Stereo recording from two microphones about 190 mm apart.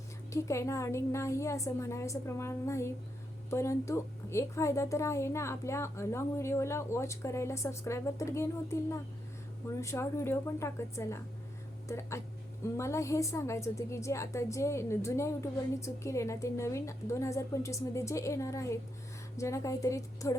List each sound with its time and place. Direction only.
0.3 s a woman's voice: 15° left (ahead or behind)